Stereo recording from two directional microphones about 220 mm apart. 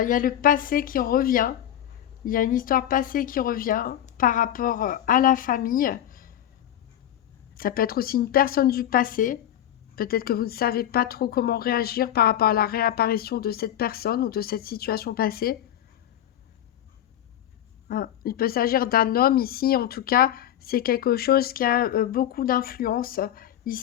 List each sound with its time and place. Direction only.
0.0 s speech: 40° left (ahead or behind)
7.5 s a woman's voice: 40° left (ahead or behind)
17.8 s a woman's voice: 40° left (ahead or behind)